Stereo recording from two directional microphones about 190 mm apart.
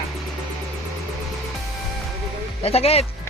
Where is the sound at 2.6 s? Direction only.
30° left (ahead or behind).